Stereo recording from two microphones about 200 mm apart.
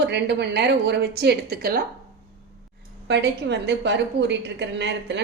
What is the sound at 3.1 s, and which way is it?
A woman's voice, 60° right (ahead or behind).